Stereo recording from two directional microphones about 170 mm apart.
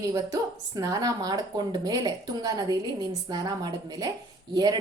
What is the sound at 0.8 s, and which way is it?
A woman's voice, 20° right (ahead or behind).